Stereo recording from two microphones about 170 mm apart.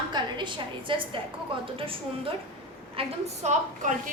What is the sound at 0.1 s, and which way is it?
Speech, 25° right (ahead or behind).